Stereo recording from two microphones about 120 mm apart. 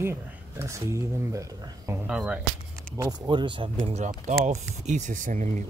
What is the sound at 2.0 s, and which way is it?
Speech, 10° right (ahead or behind).